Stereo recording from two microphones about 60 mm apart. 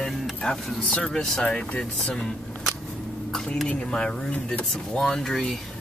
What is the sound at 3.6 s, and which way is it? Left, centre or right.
Speech, centre.